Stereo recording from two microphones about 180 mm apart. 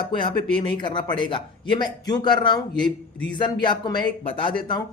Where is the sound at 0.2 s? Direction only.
25° left (ahead or behind).